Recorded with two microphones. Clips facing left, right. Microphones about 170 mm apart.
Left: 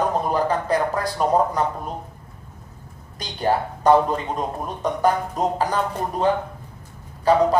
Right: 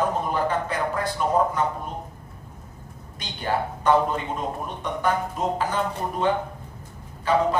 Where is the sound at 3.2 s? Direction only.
40° left (ahead or behind).